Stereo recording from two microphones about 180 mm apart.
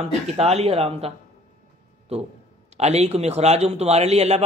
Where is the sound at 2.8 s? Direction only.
35° right (ahead or behind).